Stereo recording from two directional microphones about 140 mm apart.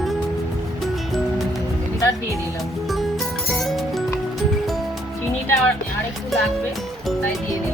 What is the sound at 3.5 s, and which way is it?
Music, centre (ahead or behind).